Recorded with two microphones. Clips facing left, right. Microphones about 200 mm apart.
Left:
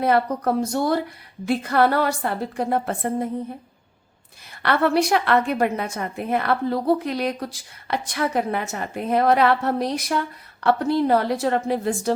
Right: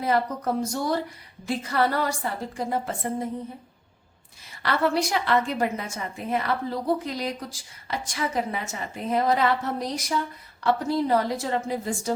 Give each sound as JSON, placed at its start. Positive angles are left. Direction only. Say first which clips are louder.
{"t": 0.0, "sound": "a woman's voice", "louder": "left 5 dB", "side_deg": 60}
{"t": 4.6, "sound": "a woman's voice", "louder": "left 4 dB", "side_deg": 60}